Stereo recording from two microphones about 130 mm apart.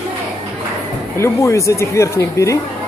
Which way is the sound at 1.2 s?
20° left (ahead or behind).